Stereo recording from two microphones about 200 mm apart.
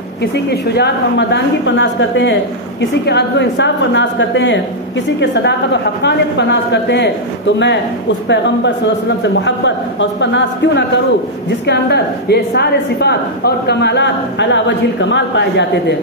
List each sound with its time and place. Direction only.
0.2 s a woman's voice: 55° left (ahead or behind)